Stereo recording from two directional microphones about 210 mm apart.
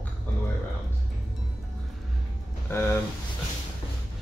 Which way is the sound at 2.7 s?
10° left (ahead or behind).